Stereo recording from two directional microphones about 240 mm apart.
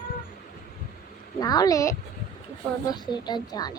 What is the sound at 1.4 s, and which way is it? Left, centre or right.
A child's voice, centre.